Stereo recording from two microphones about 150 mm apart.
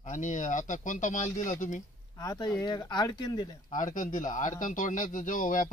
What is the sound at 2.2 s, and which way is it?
Speech, 25° left (ahead or behind).